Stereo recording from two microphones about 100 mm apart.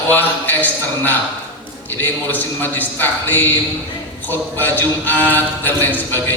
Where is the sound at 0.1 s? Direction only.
20° left (ahead or behind).